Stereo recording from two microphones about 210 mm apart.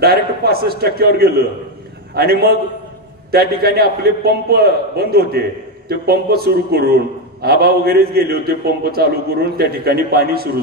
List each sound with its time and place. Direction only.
0.0 s a man's voice: 50° right (ahead or behind)